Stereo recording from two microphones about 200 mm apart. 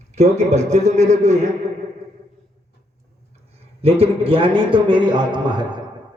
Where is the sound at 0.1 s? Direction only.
35° right (ahead or behind).